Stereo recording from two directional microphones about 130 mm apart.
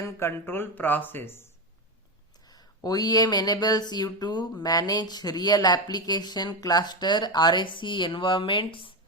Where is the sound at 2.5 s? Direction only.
30° left (ahead or behind).